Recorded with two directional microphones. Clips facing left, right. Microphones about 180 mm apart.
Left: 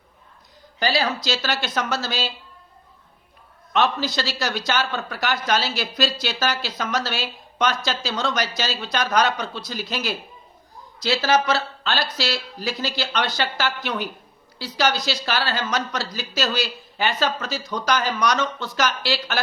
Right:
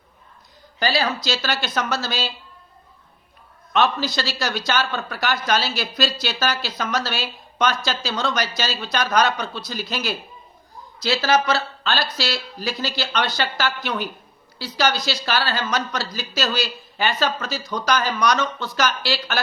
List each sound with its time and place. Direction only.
0.8 s a man's voice: 20° left (ahead or behind)
3.7 s a man's voice: 20° left (ahead or behind)